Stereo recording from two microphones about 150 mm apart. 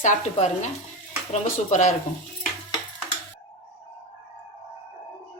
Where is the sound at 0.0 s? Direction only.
55° left (ahead or behind).